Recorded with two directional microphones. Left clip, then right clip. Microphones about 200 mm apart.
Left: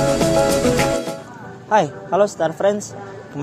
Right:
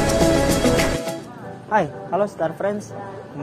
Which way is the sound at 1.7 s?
45° left (ahead or behind).